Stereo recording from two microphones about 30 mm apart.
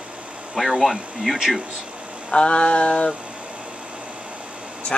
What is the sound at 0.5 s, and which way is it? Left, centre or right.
Speech, centre.